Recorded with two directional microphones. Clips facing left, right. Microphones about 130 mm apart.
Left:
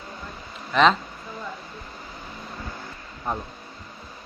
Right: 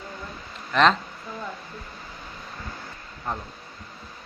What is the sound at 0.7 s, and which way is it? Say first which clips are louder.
Speech: left 1 dB; centre (ahead or behind).